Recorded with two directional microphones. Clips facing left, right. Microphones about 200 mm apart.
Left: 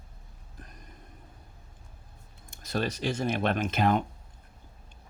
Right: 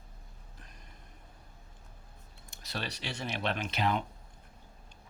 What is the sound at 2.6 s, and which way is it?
Speech, 45° left (ahead or behind).